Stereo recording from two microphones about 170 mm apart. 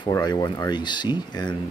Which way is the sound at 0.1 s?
25° left (ahead or behind).